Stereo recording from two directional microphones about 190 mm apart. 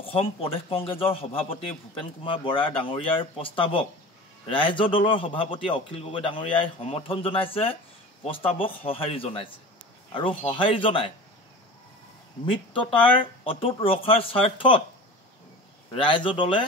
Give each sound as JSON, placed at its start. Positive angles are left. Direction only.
{"t": 0.0, "sound": "a man's voice", "side_deg": 30}
{"t": 12.4, "sound": "a man's voice", "side_deg": 25}
{"t": 15.9, "sound": "a man's voice", "side_deg": 25}